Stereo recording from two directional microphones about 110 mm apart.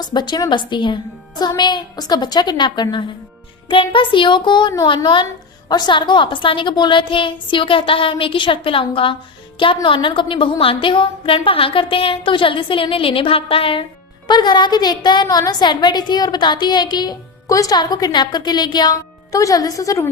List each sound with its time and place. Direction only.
0.0 s a woman's voice: 40° left (ahead or behind)
14.3 s a woman's voice: 40° left (ahead or behind)